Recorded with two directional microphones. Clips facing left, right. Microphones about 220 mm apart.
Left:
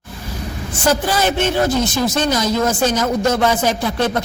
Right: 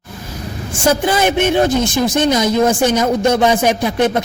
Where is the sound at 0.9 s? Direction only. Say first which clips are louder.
Right 3 dB; 15° right (ahead or behind).